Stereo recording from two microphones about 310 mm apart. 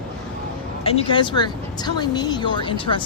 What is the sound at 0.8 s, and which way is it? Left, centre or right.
A woman's voice, centre.